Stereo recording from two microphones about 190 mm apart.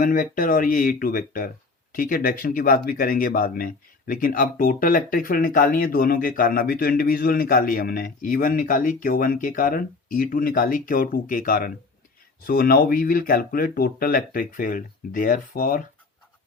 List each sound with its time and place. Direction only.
0.0 s speech: 45° left (ahead or behind)